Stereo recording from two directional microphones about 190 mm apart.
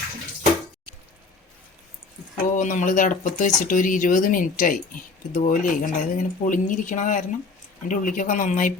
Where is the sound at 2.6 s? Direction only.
45° left (ahead or behind).